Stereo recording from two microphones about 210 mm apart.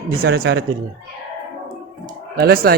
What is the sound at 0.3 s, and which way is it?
Speech, 55° right (ahead or behind).